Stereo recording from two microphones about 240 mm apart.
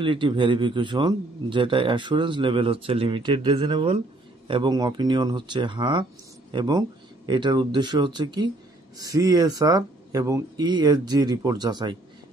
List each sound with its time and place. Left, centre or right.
0.0 s a man's voice: right